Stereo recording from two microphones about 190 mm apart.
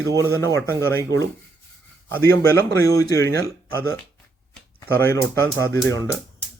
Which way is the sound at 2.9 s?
15° left (ahead or behind).